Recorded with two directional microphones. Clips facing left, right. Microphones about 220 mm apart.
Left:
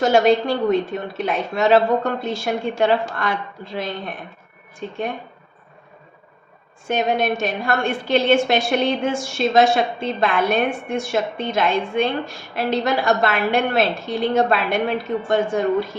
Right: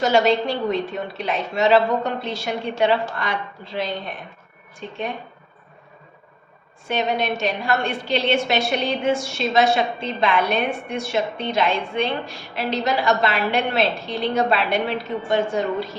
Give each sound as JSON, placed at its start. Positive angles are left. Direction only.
{"t": 0.0, "sound": "a woman's voice", "side_deg": 50}
{"t": 6.8, "sound": "a woman's voice", "side_deg": 50}